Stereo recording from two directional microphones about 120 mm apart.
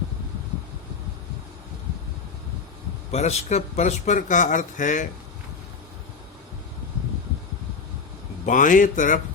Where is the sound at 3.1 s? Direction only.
70° left (ahead or behind); by 5.1 s 90° left.